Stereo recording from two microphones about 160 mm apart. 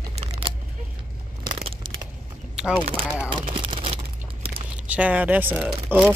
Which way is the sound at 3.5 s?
35° right (ahead or behind).